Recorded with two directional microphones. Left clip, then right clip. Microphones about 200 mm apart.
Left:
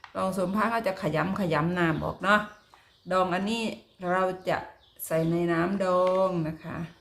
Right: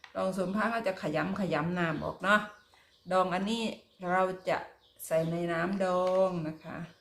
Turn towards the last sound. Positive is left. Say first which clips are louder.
# left 5 dB
turn(degrees=20)  # may be behind; listen again after turning